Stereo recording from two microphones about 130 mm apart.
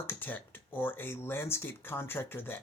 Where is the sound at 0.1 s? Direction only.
15° left (ahead or behind).